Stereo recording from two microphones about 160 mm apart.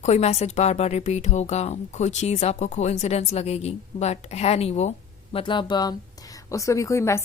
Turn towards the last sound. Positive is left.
turn(degrees=20)  # may be behind; listen again after turning